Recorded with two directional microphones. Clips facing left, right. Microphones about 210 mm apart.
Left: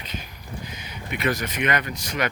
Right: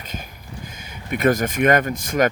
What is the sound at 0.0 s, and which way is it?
Speech, 45° right (ahead or behind).